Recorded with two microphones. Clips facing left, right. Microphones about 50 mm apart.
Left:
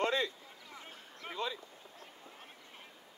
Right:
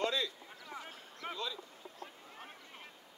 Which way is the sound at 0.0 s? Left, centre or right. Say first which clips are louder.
Left 2 dB; left.